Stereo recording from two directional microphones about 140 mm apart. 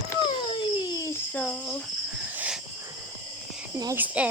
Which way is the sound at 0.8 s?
25° left (ahead or behind).